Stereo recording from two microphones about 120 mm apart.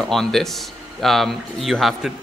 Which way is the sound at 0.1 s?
5° left (ahead or behind).